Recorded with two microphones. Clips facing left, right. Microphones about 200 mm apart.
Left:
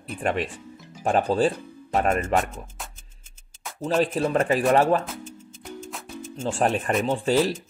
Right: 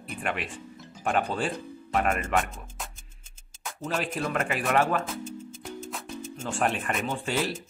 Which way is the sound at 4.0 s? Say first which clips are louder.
Left 8 dB; 35° left (ahead or behind).